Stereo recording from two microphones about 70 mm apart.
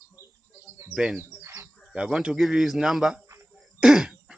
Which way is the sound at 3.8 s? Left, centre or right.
Centre.